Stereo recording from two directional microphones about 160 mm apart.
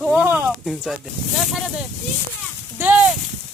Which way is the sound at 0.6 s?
Centre (ahead or behind).